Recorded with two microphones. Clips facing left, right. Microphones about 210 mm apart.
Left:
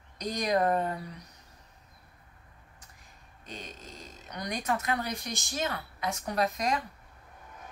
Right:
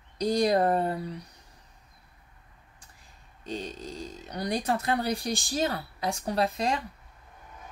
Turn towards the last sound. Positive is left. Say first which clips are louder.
# right 2 dB
turn(degrees=-30)  # may be behind; listen again after turning